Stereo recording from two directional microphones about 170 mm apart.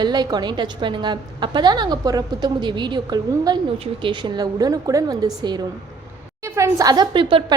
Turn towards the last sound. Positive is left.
turn(degrees=-30)  # may be behind; listen again after turning